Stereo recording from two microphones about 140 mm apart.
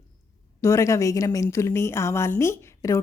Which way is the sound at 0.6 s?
20° left (ahead or behind).